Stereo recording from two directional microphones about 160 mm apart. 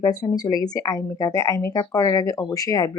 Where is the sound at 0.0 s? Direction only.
25° left (ahead or behind).